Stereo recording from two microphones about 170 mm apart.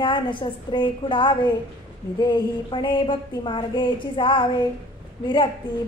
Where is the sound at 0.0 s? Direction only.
30° left (ahead or behind).